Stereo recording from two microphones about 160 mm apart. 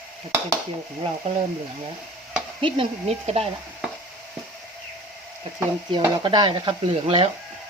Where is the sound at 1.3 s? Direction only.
45° right (ahead or behind).